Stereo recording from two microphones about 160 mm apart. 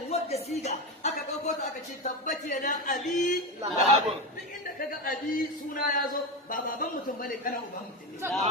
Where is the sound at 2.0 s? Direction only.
55° left (ahead or behind).